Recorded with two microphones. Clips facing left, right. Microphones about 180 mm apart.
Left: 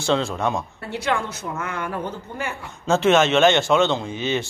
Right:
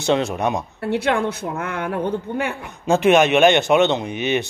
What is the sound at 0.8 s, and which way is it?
A woman's voice, 60° right (ahead or behind).